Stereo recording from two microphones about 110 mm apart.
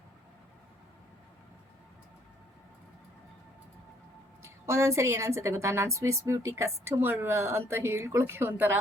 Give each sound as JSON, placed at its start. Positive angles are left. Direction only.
{"t": 4.4, "sound": "a woman's voice", "side_deg": -25}